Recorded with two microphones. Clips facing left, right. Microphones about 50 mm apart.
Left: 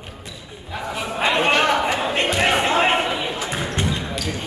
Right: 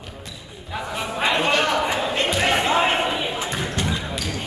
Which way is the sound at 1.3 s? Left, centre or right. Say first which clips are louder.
Left 3 dB; left.